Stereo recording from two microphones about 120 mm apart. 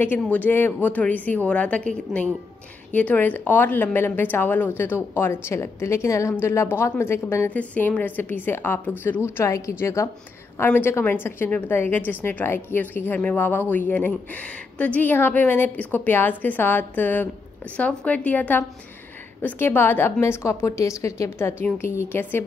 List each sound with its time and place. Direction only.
0.0 s a woman's voice: 15° left (ahead or behind)